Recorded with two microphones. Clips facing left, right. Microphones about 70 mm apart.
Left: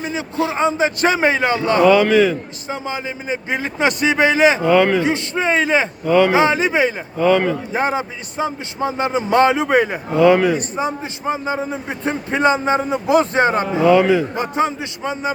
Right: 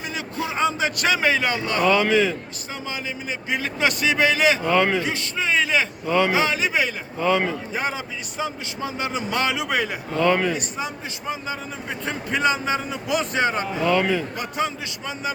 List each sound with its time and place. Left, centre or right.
0.0 s speech: left
1.9 s a man's voice: centre
2.6 s speech: left
4.6 s a man's voice: centre
5.0 s speech: left
6.1 s a man's voice: centre
6.3 s speech: left
7.2 s a man's voice: centre
7.7 s a man's voice: left
10.2 s a man's voice: centre
10.6 s a man's voice: left
13.7 s a man's voice: centre
14.3 s speech: left